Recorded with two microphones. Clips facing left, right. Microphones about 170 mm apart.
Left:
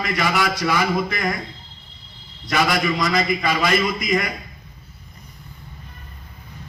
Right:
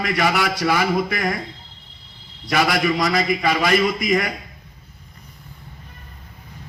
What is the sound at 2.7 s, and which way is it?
A man's voice, 55° right (ahead or behind).